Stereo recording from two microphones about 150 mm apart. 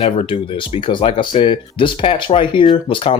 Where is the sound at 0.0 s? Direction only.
40° left (ahead or behind).